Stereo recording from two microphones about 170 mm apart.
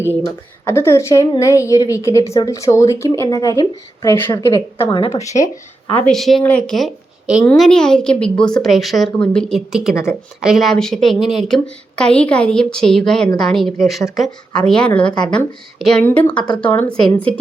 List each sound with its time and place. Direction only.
0.0 s a woman's voice: 15° left (ahead or behind)
4.9 s a woman's voice: 30° left (ahead or behind)
6.1 s a woman's voice: centre (ahead or behind)
9.9 s a woman's voice: 15° left (ahead or behind)
10.4 s a woman's voice: centre (ahead or behind)